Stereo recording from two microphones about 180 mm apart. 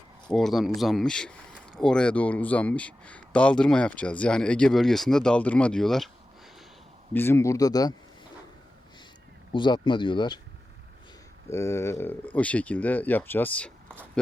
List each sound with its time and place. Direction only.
0.3 s speech: centre (ahead or behind)
7.1 s speech: 10° left (ahead or behind)
9.5 s speech: 25° left (ahead or behind)
11.4 s speech: 15° left (ahead or behind)